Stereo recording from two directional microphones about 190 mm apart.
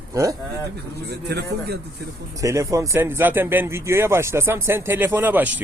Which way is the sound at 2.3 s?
15° right (ahead or behind).